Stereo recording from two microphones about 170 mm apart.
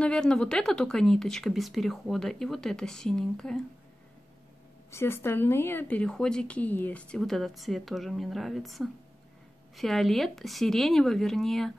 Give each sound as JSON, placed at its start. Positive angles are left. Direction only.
{"t": 0.0, "sound": "speech", "side_deg": 5}
{"t": 4.9, "sound": "speech", "side_deg": 15}